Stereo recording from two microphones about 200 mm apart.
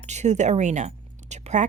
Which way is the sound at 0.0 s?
35° right (ahead or behind).